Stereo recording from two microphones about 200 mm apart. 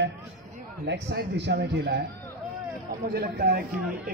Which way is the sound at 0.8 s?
60° right (ahead or behind).